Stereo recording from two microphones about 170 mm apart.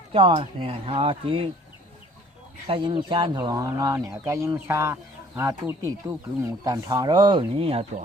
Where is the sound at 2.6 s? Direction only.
30° right (ahead or behind).